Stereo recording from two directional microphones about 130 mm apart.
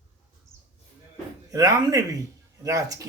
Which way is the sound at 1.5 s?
25° right (ahead or behind).